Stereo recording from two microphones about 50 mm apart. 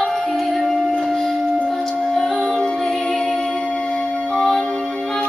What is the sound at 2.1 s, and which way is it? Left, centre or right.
Music, centre.